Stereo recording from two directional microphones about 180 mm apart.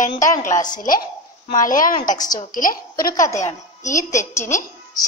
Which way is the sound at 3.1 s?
15° left (ahead or behind).